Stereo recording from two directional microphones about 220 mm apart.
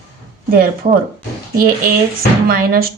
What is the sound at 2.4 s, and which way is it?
Speech, 45° right (ahead or behind).